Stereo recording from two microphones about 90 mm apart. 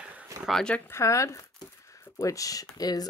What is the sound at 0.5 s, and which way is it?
Speech, 5° left (ahead or behind).